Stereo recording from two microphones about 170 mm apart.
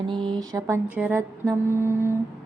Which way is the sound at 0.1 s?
25° right (ahead or behind).